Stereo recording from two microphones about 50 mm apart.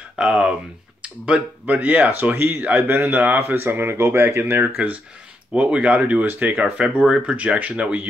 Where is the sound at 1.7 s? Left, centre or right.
Right.